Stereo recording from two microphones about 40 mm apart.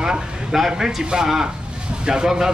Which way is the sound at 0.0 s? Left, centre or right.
Centre.